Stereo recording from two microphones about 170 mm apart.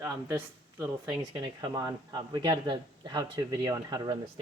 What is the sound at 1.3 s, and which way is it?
A man's voice, 25° right (ahead or behind).